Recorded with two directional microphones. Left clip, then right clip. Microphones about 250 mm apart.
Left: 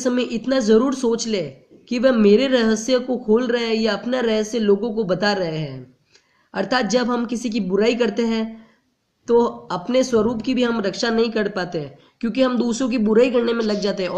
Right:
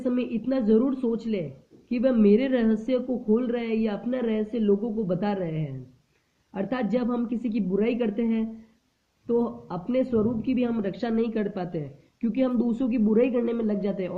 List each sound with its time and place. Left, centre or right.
0.0 s speech: centre